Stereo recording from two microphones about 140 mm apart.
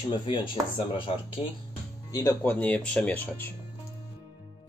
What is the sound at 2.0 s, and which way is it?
Music, 25° left (ahead or behind).